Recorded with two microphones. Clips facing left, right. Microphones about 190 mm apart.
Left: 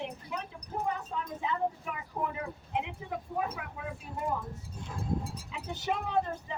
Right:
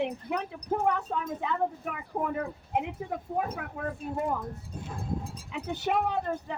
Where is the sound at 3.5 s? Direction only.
45° right (ahead or behind).